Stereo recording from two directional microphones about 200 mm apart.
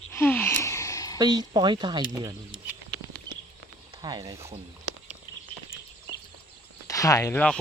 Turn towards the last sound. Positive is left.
turn(degrees=15)  # may be behind; listen again after turning